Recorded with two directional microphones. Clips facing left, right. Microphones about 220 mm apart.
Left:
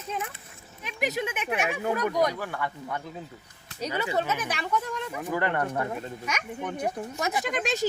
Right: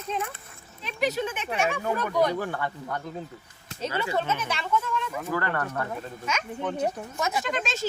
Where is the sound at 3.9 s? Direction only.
15° left (ahead or behind).